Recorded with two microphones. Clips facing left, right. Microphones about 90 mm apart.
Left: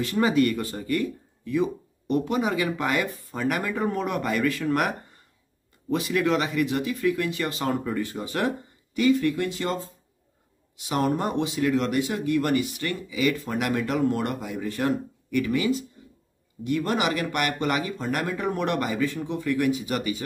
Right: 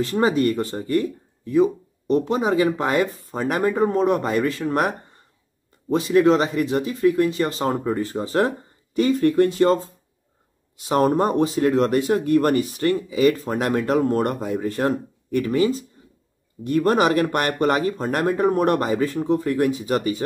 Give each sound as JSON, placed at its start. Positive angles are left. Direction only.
{"t": 0.0, "sound": "speech", "side_deg": -35}
{"t": 10.8, "sound": "speech", "side_deg": -45}